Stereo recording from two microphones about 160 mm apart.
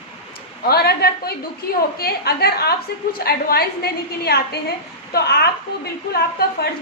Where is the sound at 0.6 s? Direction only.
75° left (ahead or behind).